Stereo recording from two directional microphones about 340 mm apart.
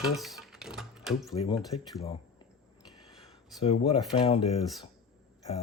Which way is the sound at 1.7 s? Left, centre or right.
Left.